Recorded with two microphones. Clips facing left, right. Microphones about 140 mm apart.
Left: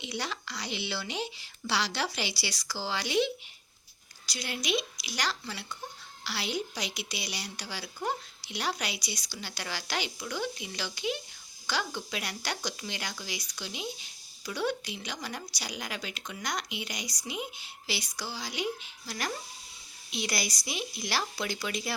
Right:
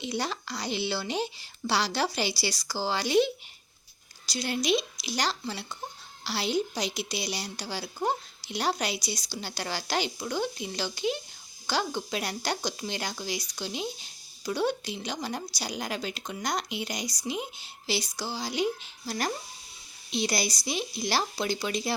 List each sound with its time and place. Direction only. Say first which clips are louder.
0.0 s speech: right 5 dB; 35° right (ahead or behind)
4.3 s speech: right 6 dB; 30° right (ahead or behind)